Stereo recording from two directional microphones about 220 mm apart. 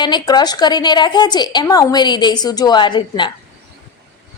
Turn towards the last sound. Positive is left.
turn(degrees=20)  # may be behind; listen again after turning